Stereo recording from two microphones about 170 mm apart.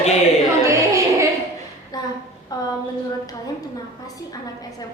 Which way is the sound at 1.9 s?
20° left (ahead or behind).